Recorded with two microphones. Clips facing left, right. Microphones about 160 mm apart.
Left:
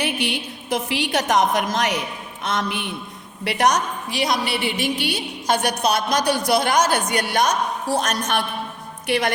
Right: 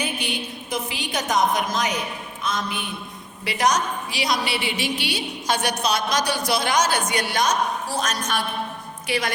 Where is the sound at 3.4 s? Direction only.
65° left (ahead or behind).